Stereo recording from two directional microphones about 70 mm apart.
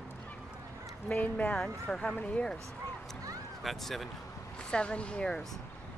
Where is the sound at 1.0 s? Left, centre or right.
Left.